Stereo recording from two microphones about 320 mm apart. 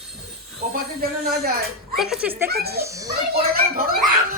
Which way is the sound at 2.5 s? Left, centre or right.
Right.